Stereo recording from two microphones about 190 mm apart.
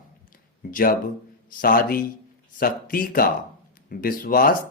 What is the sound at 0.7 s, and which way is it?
Speech, 45° left (ahead or behind).